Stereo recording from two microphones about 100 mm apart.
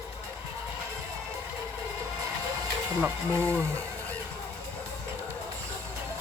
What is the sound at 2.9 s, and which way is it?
Speech, 25° right (ahead or behind).